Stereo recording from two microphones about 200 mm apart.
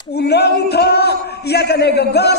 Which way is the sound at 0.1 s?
55° left (ahead or behind).